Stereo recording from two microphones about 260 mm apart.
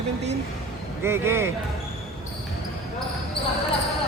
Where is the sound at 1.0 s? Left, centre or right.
Centre.